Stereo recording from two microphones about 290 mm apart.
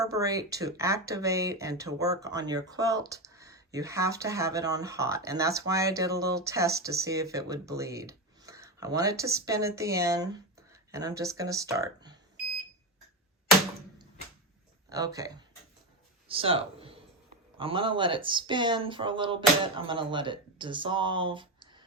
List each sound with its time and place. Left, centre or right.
0.0 s speech: centre
14.8 s speech: centre